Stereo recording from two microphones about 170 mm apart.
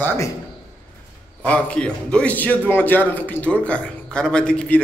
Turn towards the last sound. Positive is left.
turn(degrees=5)  # may be behind; listen again after turning